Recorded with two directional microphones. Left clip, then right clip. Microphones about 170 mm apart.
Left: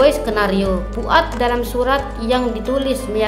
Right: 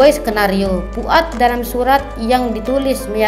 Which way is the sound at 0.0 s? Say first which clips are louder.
Right 3 dB; 15° right (ahead or behind).